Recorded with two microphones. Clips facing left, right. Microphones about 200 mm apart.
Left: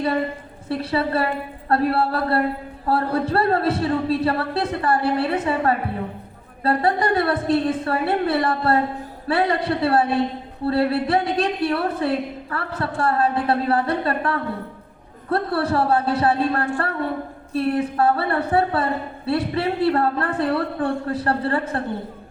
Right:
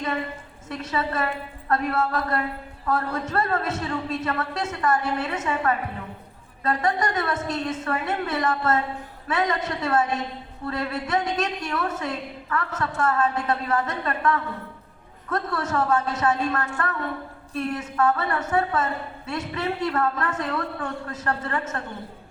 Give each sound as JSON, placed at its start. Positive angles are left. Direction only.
{"t": 0.7, "sound": "a woman's voice", "side_deg": 35}